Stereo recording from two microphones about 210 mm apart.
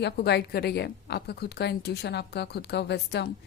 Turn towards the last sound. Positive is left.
turn(degrees=55)  # may be behind; listen again after turning